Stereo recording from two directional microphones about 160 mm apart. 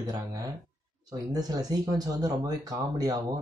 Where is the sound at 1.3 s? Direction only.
25° right (ahead or behind).